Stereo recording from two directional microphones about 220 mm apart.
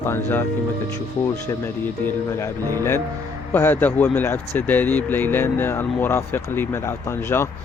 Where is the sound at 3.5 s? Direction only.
10° left (ahead or behind).